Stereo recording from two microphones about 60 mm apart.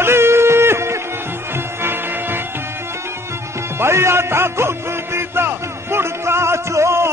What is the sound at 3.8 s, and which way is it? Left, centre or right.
Music, right.